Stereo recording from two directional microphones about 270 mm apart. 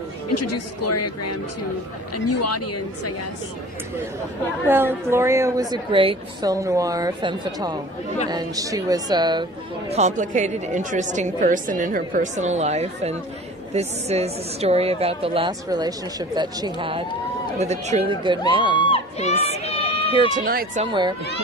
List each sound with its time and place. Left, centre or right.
0.3 s speech: left
4.6 s a woman's voice: centre
18.9 s crowd: left
20.2 s speech: right
20.8 s a woman's voice: centre